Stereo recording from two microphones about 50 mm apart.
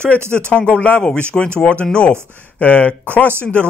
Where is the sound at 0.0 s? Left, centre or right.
Left.